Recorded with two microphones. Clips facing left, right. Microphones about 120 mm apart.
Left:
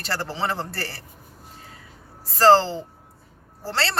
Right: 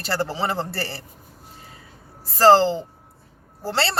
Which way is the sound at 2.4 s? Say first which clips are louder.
Right 2 dB; 10° right (ahead or behind).